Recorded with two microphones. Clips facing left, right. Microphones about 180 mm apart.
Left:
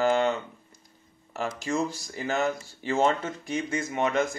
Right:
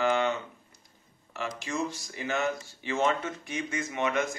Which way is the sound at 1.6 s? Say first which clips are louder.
Left 5 dB; 35° left (ahead or behind).